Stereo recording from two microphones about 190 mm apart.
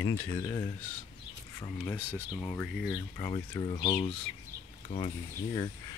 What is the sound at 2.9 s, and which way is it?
Speech, 15° left (ahead or behind).